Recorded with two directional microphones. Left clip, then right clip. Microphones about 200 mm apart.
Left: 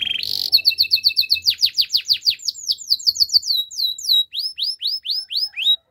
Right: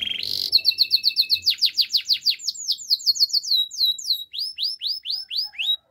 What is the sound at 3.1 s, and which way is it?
Bird, 15° left (ahead or behind).